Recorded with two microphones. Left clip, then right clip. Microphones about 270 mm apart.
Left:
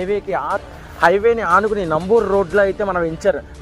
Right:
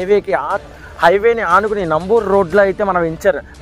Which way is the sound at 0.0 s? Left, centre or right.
Right.